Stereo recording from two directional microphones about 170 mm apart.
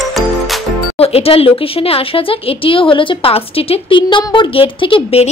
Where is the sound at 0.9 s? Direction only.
35° left (ahead or behind).